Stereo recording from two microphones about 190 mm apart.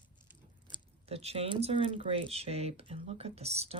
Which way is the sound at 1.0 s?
30° right (ahead or behind).